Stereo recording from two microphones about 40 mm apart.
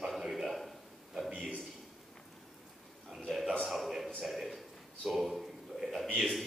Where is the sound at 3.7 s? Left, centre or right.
Centre.